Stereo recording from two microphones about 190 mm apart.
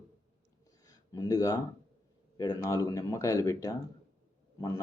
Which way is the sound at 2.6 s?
15° left (ahead or behind).